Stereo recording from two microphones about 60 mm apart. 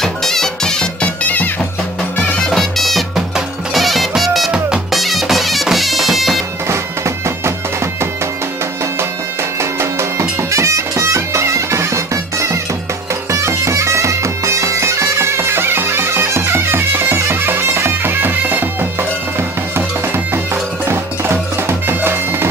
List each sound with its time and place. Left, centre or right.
0.0 s music: centre
1.2 s music: left
2.5 s music: centre
7.2 s music: right
9.6 s music: right
13.3 s bagpipes: right
20.8 s bagpipes: right